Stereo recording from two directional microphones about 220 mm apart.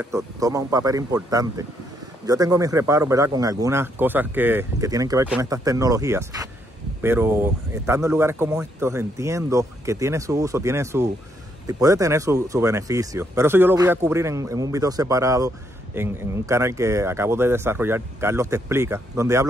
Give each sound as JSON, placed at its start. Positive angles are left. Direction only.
{"t": 0.0, "sound": "speech", "side_deg": -15}